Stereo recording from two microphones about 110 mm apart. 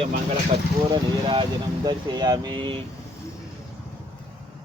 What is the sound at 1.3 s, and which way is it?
Speech, 45° right (ahead or behind).